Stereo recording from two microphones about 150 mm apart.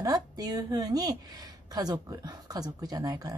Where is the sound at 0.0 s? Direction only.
25° right (ahead or behind).